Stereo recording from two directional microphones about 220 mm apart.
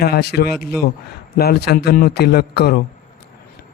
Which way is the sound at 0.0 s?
45° left (ahead or behind).